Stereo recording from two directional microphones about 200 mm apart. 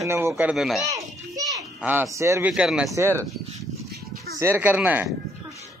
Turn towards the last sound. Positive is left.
turn(degrees=-5)  # may be behind; listen again after turning